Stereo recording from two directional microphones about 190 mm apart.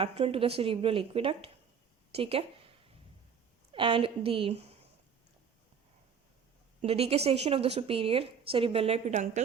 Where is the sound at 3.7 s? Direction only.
25° right (ahead or behind).